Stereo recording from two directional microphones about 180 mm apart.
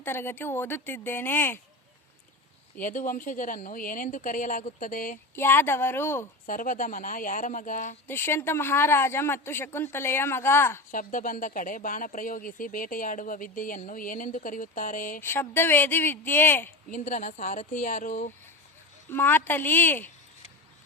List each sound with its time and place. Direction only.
0.0 s a woman's voice: 10° left (ahead or behind)
2.7 s speech: 45° left (ahead or behind)
5.3 s a woman's voice: 10° left (ahead or behind)
6.4 s speech: 50° left (ahead or behind)
8.0 s a woman's voice: 10° left (ahead or behind)
10.9 s speech: 50° left (ahead or behind)
15.2 s a woman's voice: 10° left (ahead or behind)
16.9 s speech: 45° left (ahead or behind)
19.1 s a woman's voice: 10° left (ahead or behind)